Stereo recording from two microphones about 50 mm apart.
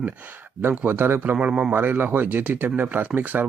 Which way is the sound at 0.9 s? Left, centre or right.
Right.